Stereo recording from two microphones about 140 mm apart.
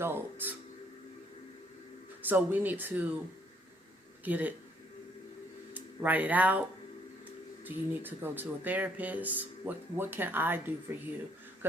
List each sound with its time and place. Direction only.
0.0 s speech: 15° right (ahead or behind)
2.3 s speech: 15° right (ahead or behind)
4.2 s speech: 10° right (ahead or behind)
5.7 s speech: 10° right (ahead or behind)
7.6 s speech: 15° right (ahead or behind)